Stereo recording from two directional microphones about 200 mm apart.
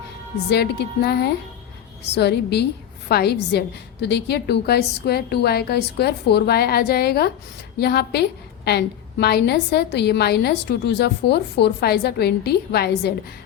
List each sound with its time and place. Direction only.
0.5 s a woman's voice: 55° left (ahead or behind)